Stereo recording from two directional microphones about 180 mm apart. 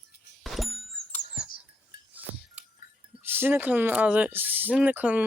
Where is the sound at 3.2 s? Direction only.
10° right (ahead or behind).